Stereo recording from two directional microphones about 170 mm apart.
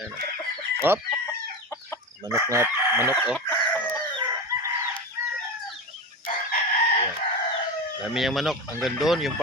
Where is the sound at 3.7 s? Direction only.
10° left (ahead or behind).